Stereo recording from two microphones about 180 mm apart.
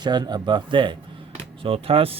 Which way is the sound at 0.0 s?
25° right (ahead or behind).